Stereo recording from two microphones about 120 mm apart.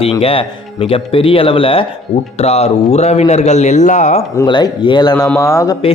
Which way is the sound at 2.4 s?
60° left (ahead or behind).